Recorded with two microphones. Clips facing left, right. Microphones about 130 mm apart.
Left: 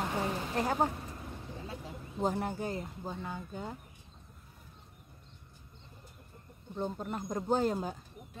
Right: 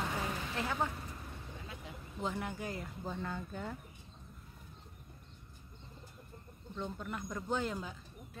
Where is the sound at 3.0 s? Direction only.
15° left (ahead or behind).